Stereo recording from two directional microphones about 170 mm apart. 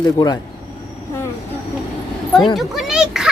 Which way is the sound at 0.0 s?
25° left (ahead or behind).